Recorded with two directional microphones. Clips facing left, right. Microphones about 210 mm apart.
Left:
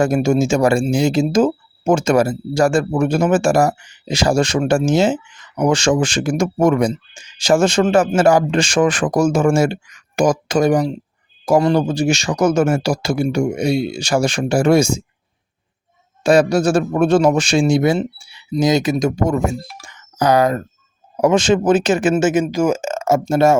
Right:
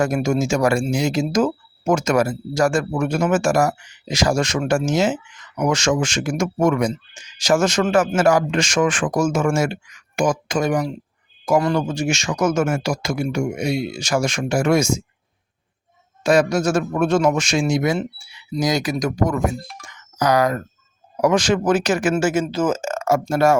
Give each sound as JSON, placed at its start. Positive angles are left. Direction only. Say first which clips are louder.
{"t": 0.0, "sound": "speech", "louder": "left 4 dB", "side_deg": 30}
{"t": 16.2, "sound": "speech", "louder": "left 3 dB", "side_deg": 30}
{"t": 19.5, "sound": "speech", "louder": "left 3 dB", "side_deg": 5}
{"t": 19.8, "sound": "a sound", "louder": "left 3 dB", "side_deg": 30}
{"t": 21.2, "sound": "speech", "louder": "left 3 dB", "side_deg": 25}